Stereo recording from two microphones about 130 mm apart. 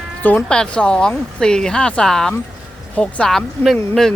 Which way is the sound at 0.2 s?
15° left (ahead or behind).